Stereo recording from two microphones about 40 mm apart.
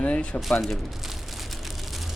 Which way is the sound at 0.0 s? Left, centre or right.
Left.